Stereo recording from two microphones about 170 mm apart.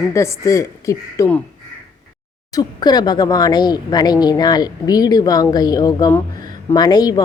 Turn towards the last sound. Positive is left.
turn(degrees=25)  # may be behind; listen again after turning